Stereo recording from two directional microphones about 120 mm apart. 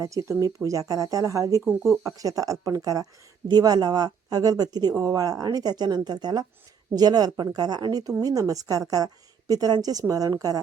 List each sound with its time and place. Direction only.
0.0 s speech: 25° right (ahead or behind)
1.6 s speech: 5° right (ahead or behind)
2.0 s a woman's voice: 30° right (ahead or behind)